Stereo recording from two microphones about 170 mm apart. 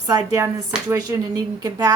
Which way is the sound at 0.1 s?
20° right (ahead or behind).